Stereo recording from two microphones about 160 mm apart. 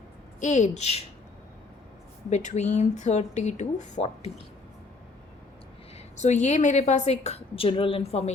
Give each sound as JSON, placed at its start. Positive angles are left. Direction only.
{"t": 0.3, "sound": "a woman's voice", "side_deg": 45}
{"t": 2.3, "sound": "a woman's voice", "side_deg": 45}
{"t": 6.1, "sound": "a woman's voice", "side_deg": 45}